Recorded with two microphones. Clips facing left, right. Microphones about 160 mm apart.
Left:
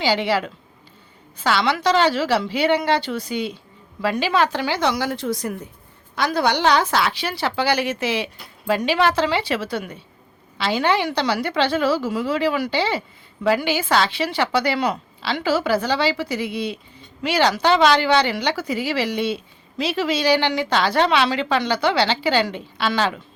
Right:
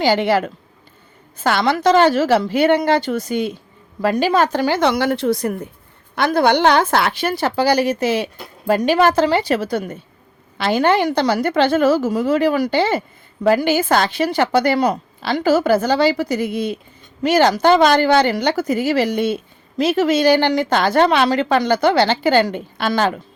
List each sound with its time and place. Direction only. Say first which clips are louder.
0.0 s a woman's voice: right 5 dB; 50° right (ahead or behind)